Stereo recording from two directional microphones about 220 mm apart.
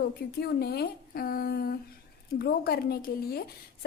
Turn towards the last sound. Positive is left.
turn(degrees=45)  # may be behind; listen again after turning